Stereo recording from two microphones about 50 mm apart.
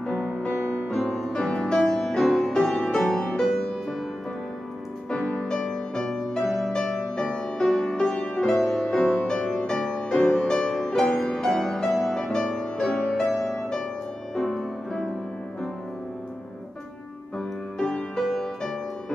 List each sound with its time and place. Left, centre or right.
0.0 s music: centre
0.8 s music: centre
5.1 s music: centre
9.3 s music: centre
17.7 s music: centre